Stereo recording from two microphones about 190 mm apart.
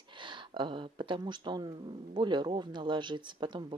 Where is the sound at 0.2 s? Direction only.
25° right (ahead or behind).